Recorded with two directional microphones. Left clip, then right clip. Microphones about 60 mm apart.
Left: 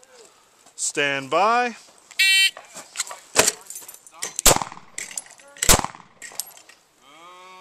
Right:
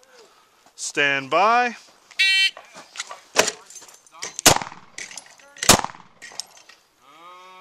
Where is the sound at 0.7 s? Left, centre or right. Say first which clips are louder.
Right 2 dB; right.